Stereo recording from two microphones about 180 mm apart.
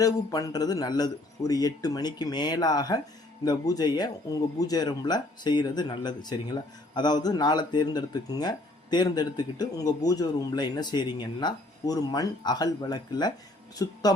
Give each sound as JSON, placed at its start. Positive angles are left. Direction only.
{"t": 0.0, "sound": "speech", "side_deg": 20}